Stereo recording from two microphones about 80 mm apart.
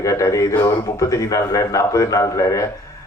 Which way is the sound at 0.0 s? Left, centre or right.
Left.